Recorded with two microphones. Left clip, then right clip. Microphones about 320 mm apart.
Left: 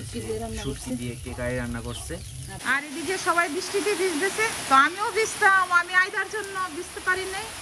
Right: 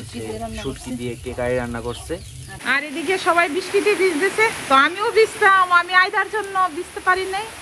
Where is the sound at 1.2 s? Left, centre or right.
Centre.